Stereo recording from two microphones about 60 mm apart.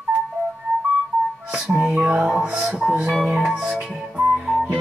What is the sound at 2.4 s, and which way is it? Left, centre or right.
Music, centre.